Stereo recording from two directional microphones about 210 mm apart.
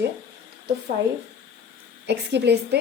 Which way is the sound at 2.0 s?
55° right (ahead or behind).